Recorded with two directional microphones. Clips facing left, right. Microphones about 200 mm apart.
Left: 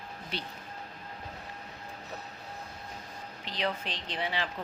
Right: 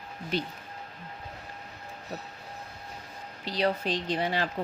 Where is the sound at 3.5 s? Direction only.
40° right (ahead or behind).